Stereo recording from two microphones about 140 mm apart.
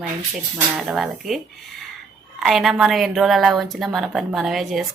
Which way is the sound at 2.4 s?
Centre (ahead or behind).